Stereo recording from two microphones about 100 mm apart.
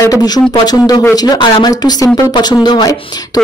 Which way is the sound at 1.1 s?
40° left (ahead or behind).